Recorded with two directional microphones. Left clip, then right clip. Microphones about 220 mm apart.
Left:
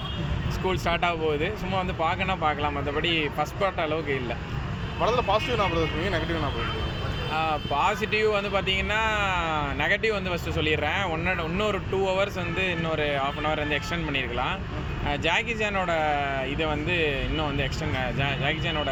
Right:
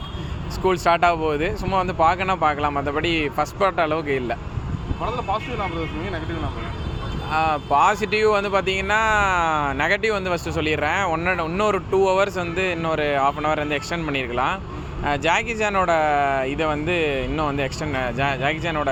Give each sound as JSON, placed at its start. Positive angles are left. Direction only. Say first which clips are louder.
{"t": 0.6, "sound": "speech", "louder": "right 8 dB", "side_deg": -50}
{"t": 5.0, "sound": "speech", "louder": "left 2 dB", "side_deg": 25}
{"t": 7.3, "sound": "speech", "louder": "right 8 dB", "side_deg": -50}